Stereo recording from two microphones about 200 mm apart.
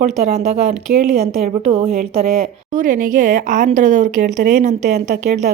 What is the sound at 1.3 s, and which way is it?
Speech, 30° right (ahead or behind).